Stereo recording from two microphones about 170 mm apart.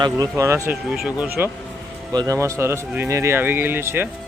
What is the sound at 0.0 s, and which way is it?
Speech, 20° right (ahead or behind).